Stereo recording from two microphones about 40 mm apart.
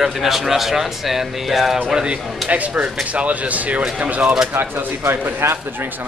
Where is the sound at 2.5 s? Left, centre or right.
Right.